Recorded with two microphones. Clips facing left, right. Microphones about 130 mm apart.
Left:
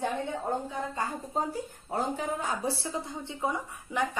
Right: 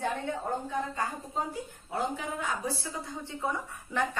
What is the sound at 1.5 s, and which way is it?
Speech, 40° left (ahead or behind).